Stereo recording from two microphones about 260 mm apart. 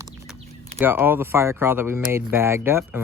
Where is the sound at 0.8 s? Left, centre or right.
Centre.